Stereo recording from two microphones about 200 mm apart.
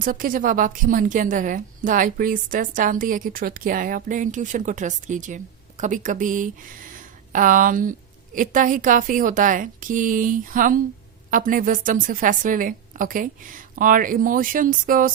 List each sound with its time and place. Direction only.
0.0 s a woman's voice: 45° right (ahead or behind)